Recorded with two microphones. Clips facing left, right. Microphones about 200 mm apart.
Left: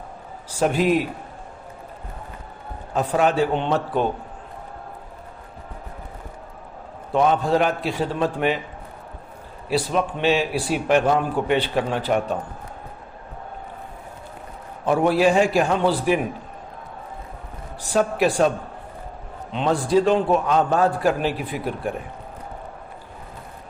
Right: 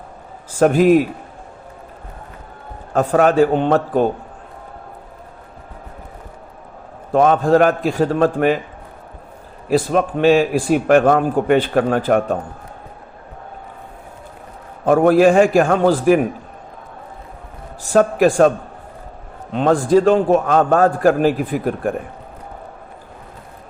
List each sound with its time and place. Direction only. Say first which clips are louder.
0.6 s a man's voice: right 7 dB; 45° right (ahead or behind)
2.9 s a man's voice: right 6 dB; 50° right (ahead or behind)
7.1 s a man's voice: right 6 dB; 50° right (ahead or behind)
9.6 s a man's voice: right 6 dB; 50° right (ahead or behind)
14.8 s a man's voice: right 6 dB; 50° right (ahead or behind)
17.8 s a man's voice: right 6 dB; 50° right (ahead or behind)
19.5 s a man's voice: right 5 dB; 45° right (ahead or behind)